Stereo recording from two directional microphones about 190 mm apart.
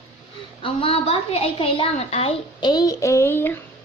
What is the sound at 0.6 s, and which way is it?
A woman's voice, 30° left (ahead or behind).